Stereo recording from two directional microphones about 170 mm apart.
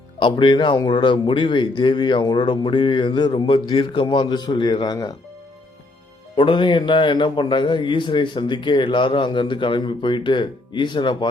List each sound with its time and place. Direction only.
0.2 s speech: 30° left (ahead or behind)
6.3 s speech: 30° left (ahead or behind)